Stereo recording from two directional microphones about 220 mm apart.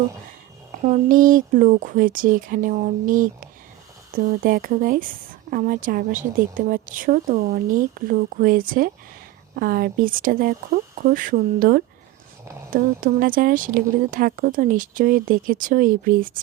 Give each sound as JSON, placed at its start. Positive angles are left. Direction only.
{"t": 0.9, "sound": "a woman's voice", "side_deg": -40}